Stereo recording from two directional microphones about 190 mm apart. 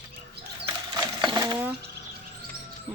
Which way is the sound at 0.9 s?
20° right (ahead or behind).